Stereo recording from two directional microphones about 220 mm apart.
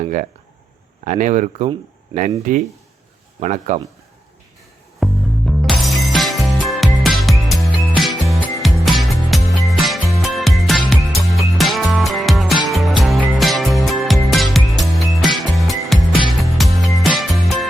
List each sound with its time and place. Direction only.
0.0 s speech: 35° right (ahead or behind)
5.0 s music: centre (ahead or behind)